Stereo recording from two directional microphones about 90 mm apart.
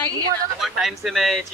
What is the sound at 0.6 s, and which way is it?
Speech, centre (ahead or behind).